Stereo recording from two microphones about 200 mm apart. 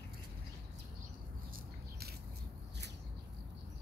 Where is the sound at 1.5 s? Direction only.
50° right (ahead or behind).